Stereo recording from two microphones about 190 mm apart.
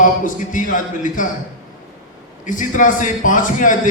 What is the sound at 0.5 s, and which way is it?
Speech, 45° left (ahead or behind).